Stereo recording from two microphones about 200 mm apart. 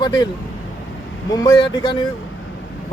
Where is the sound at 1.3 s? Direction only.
20° left (ahead or behind).